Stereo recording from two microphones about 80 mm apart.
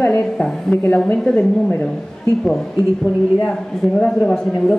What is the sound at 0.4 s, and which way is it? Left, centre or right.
A woman's voice, centre.